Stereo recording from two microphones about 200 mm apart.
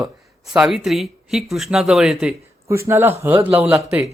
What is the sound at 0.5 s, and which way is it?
A man's voice, 5° right (ahead or behind).